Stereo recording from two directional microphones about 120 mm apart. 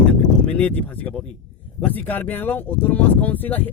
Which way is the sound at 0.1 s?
10° left (ahead or behind).